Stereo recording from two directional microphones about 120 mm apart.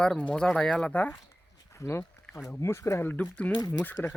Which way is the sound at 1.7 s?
20° left (ahead or behind).